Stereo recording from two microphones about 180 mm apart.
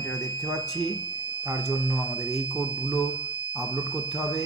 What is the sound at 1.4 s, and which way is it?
Speech, 5° right (ahead or behind).